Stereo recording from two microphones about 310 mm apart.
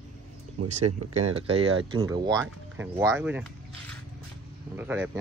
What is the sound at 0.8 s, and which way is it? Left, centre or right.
Speech, right.